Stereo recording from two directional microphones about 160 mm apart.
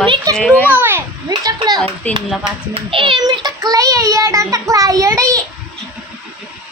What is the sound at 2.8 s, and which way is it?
A child's voice, 35° right (ahead or behind).